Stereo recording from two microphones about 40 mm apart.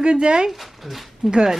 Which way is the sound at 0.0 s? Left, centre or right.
Right.